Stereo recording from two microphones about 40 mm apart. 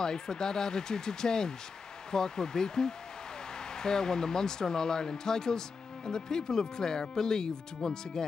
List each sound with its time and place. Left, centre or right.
0.0 s speech: centre